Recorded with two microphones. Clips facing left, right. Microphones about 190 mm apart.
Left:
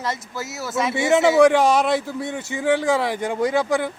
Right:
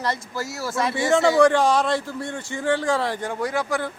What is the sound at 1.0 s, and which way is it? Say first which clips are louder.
A man's voice: left 2 dB; 20° left (ahead or behind).